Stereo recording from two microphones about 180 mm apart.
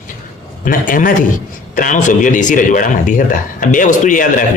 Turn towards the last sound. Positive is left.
turn(degrees=45)  # may be behind; listen again after turning